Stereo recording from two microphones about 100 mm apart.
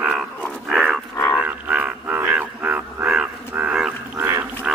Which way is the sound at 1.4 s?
15° right (ahead or behind).